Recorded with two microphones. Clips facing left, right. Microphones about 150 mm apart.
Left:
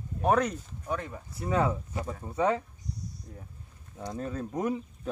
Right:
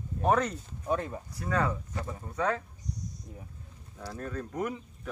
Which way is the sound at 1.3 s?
20° left (ahead or behind).